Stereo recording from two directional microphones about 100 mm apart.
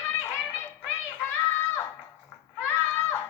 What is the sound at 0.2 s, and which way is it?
Music, 25° left (ahead or behind).